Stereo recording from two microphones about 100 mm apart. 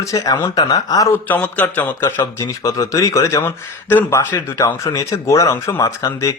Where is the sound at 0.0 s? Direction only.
35° left (ahead or behind).